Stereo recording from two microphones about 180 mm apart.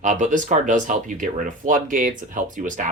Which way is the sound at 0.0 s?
45° right (ahead or behind).